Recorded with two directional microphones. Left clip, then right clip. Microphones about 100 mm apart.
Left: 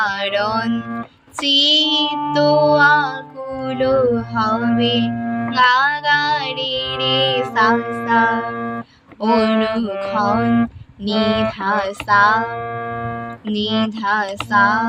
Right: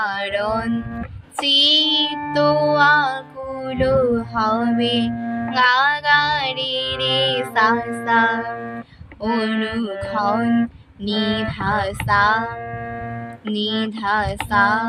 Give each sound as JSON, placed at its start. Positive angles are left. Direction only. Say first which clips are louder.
{"t": 0.0, "sound": "music", "louder": "left 3 dB", "side_deg": 40}
{"t": 1.4, "sound": "music", "louder": "left 1 dB", "side_deg": 30}
{"t": 9.2, "sound": "speech", "louder": "left 6 dB", "side_deg": 55}
{"t": 9.5, "sound": "music", "louder": "left 5 dB", "side_deg": 35}
{"t": 11.0, "sound": "child singing", "louder": "left 5 dB", "side_deg": 35}
{"t": 13.5, "sound": "child singing", "louder": "left 2 dB", "side_deg": 35}